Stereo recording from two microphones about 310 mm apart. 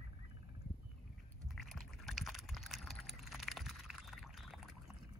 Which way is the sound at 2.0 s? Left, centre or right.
Centre.